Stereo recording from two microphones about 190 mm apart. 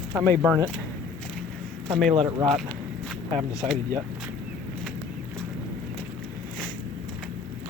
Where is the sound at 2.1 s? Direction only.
25° right (ahead or behind).